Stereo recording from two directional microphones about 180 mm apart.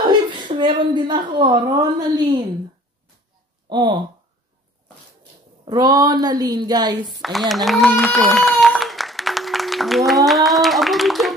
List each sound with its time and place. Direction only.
0.0 s a woman's voice: 25° right (ahead or behind)
3.6 s speech: 25° right (ahead or behind)
5.7 s a woman's voice: 20° right (ahead or behind)
7.2 s a sound: centre (ahead or behind)